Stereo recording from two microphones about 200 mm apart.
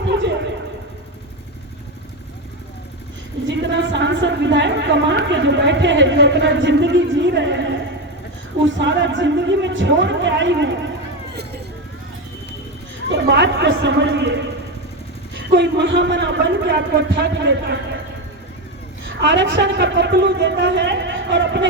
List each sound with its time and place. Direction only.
0.0 s a sound: 60° right (ahead or behind)
3.5 s a sound: 60° right (ahead or behind)
8.6 s a woman's voice: 65° right (ahead or behind)
13.1 s a woman's voice: 60° right (ahead or behind)
15.5 s a woman's voice: 60° right (ahead or behind)
19.2 s a woman's voice: 65° right (ahead or behind)